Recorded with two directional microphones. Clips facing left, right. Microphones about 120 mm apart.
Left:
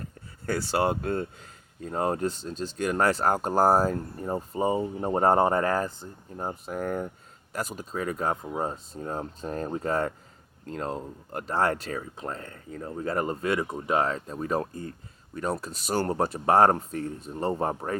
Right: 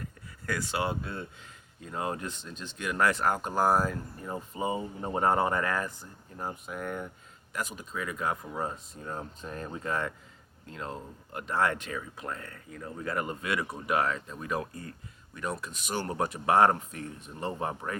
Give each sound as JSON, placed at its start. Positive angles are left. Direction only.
{"t": 0.0, "sound": "speech", "side_deg": 30}